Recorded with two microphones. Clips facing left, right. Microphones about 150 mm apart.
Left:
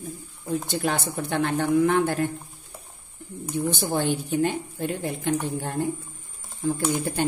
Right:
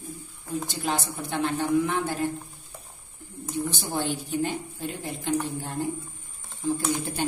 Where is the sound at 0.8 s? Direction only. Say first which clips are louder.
Left 3 dB; 55° left (ahead or behind).